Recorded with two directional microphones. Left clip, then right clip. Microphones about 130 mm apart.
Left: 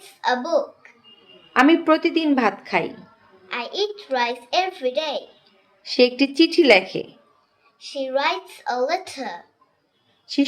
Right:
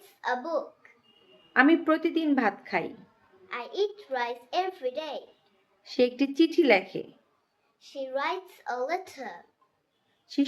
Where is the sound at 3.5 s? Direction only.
20° right (ahead or behind).